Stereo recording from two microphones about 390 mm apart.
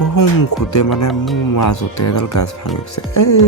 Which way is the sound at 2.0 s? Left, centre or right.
Left.